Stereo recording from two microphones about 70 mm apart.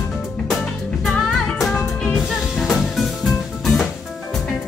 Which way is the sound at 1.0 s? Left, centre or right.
Centre.